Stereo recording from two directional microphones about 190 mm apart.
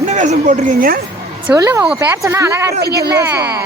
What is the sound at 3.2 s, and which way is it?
Speech, 15° right (ahead or behind).